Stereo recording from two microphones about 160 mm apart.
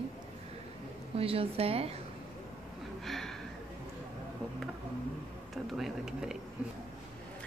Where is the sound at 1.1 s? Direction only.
35° right (ahead or behind).